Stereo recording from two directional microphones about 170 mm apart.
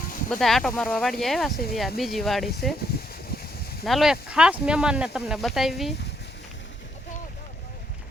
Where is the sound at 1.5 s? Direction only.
65° left (ahead or behind).